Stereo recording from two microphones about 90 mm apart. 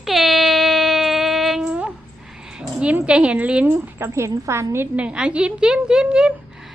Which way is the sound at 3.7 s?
30° right (ahead or behind).